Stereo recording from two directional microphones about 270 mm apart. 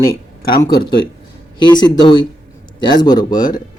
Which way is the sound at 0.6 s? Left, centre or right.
Centre.